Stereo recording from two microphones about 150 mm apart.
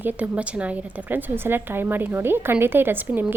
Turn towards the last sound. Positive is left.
turn(degrees=-10)  # may be behind; listen again after turning